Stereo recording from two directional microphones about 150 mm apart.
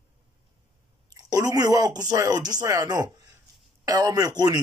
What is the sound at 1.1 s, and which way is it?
Speech, 25° right (ahead or behind).